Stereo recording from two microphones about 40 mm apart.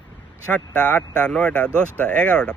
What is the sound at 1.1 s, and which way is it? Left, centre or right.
Speech, left.